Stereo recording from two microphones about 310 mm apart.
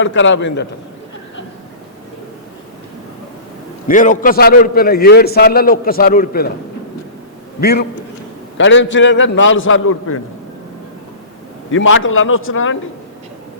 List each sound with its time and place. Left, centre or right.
0.0 s a man's voice: left
3.8 s a man's voice: left
7.6 s a man's voice: left
11.9 s a man's voice: left